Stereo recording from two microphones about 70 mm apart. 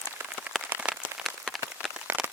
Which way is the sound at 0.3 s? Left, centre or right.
Right.